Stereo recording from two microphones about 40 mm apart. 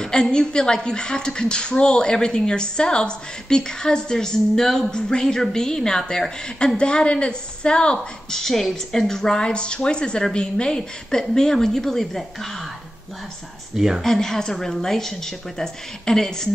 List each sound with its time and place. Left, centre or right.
0.0 s a woman's voice: centre
6.8 s a woman's voice: left
8.4 s a woman's voice: centre
9.5 s a woman's voice: left; by 12.4 s centre
13.7 s speech: centre
14.2 s a woman's voice: centre